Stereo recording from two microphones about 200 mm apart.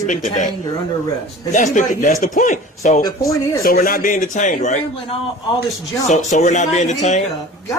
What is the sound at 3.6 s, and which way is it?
A man's voice, 45° left (ahead or behind).